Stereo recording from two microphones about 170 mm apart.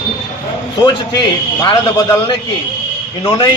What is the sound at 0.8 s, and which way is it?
Speech, 25° left (ahead or behind).